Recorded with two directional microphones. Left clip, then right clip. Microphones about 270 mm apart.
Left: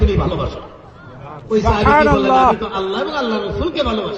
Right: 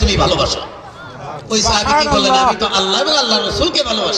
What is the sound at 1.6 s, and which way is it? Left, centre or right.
Speech, centre.